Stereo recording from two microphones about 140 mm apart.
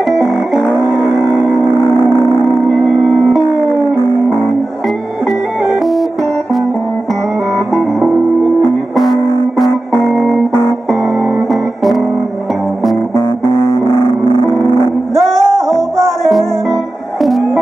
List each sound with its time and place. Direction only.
0.0 s music: centre (ahead or behind)
2.7 s music: 5° right (ahead or behind)
4.8 s music: centre (ahead or behind)
7.7 s music: centre (ahead or behind)
13.7 s music: 20° left (ahead or behind)
15.1 s music: centre (ahead or behind)